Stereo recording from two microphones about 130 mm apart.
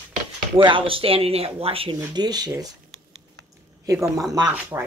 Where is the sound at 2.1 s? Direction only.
30° right (ahead or behind).